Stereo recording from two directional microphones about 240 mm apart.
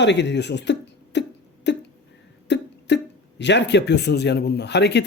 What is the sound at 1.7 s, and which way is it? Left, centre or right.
Hiccup, left.